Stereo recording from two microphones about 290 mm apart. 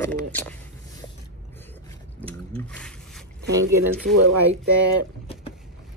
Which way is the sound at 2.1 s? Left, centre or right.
Centre.